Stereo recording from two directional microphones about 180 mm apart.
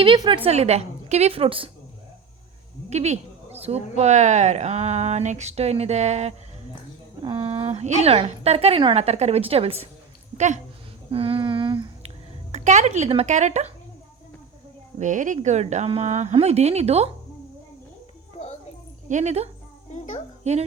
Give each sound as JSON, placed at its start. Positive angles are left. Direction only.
{"t": 0.0, "sound": "a woman's voice", "side_deg": -25}
{"t": 2.9, "sound": "a woman's voice", "side_deg": -40}
{"t": 7.2, "sound": "a woman's voice", "side_deg": -25}
{"t": 11.1, "sound": "speech", "side_deg": -30}
{"t": 14.9, "sound": "a woman's voice", "side_deg": -45}
{"t": 19.0, "sound": "speech", "side_deg": -40}